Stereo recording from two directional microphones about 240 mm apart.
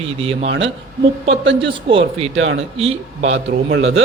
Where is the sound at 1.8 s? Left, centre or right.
Right.